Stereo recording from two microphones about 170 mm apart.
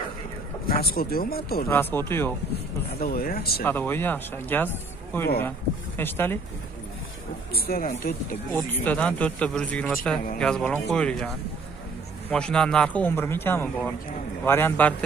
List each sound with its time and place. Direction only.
0.7 s speech: 65° left (ahead or behind)
1.7 s a man's voice: 10° left (ahead or behind)
3.0 s speech: 60° left (ahead or behind)
3.6 s a man's voice: 10° left (ahead or behind)
5.9 s a man's voice: 10° left (ahead or behind)
7.5 s speech: 65° left (ahead or behind)
8.5 s a man's voice: 10° left (ahead or behind)
12.3 s a man's voice: 5° left (ahead or behind)